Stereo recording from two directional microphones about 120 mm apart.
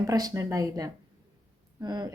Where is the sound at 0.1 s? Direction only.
30° right (ahead or behind).